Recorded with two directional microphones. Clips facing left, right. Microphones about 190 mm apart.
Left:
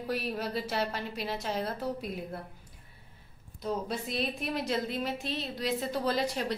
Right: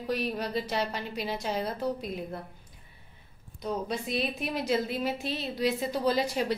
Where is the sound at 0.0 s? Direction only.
5° left (ahead or behind).